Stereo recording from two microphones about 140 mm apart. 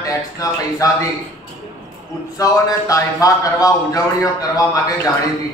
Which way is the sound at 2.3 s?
25° left (ahead or behind).